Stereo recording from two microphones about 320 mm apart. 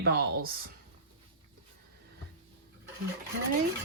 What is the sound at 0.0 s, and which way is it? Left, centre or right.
Speech, right.